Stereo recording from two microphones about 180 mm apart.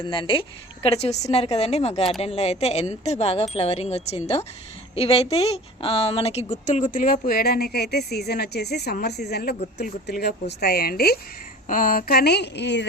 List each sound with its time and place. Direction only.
0.0 s a woman's voice: 30° left (ahead or behind); by 12.8 s 70° left (ahead or behind)